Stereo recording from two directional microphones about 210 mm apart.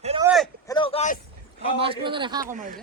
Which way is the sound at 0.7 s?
25° left (ahead or behind).